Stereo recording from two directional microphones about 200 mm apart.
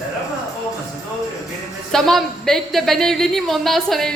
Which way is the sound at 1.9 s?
Centre (ahead or behind).